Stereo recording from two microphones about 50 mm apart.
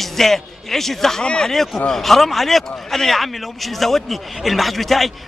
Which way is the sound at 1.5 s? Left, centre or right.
Centre.